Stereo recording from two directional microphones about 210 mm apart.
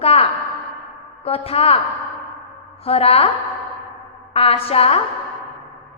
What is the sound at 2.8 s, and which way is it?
Speech, 30° left (ahead or behind).